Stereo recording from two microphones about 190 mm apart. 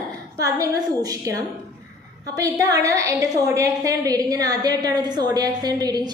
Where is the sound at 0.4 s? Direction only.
20° right (ahead or behind).